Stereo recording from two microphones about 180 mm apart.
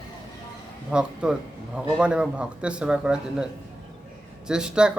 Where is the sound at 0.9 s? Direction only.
5° right (ahead or behind).